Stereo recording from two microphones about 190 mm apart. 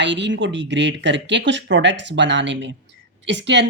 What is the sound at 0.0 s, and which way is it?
Speech, 70° right (ahead or behind).